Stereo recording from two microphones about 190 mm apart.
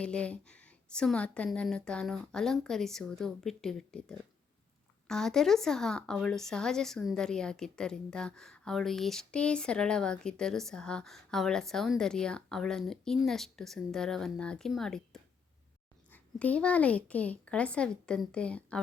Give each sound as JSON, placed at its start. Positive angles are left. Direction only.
{"t": 0.0, "sound": "a woman's voice", "side_deg": 5}